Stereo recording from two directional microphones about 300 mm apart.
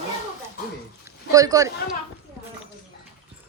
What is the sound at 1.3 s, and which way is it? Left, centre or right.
Speech, centre.